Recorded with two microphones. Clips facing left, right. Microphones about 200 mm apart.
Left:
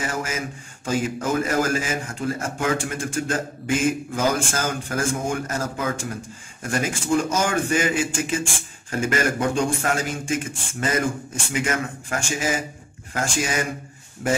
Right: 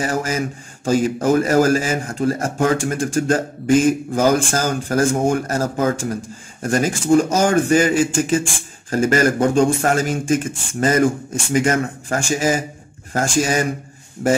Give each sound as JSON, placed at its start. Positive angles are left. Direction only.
{"t": 0.0, "sound": "speech", "side_deg": -40}